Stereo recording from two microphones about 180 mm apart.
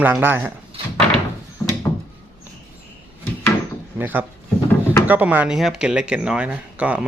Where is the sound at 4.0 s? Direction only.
10° right (ahead or behind).